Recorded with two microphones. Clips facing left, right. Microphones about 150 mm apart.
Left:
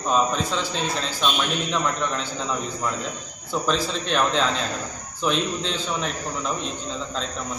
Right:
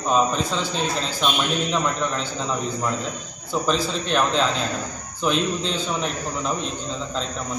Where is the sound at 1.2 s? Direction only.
20° right (ahead or behind).